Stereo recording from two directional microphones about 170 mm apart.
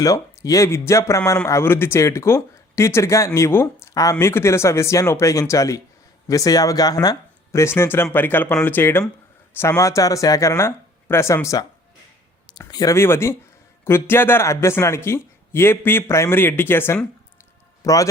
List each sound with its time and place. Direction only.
0.0 s speech: 20° left (ahead or behind)